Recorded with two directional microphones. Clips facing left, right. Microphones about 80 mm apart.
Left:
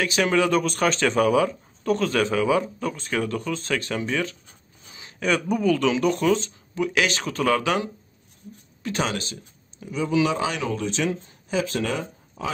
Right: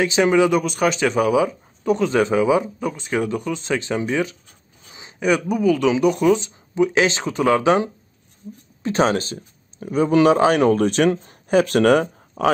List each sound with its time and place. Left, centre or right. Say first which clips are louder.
0.0 s speech: right 5 dB; right